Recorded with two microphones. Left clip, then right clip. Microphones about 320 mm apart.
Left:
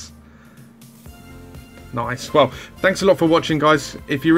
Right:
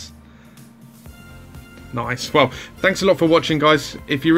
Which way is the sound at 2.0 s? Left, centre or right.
Centre.